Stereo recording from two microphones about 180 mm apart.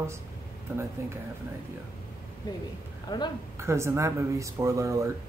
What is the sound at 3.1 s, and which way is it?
Speech, 20° left (ahead or behind).